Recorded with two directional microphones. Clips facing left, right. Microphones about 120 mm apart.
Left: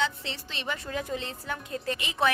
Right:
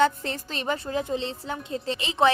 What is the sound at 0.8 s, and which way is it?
Speech, 30° right (ahead or behind).